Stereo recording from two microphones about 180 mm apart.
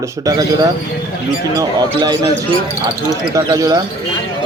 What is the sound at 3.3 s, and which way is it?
Speech, 20° right (ahead or behind).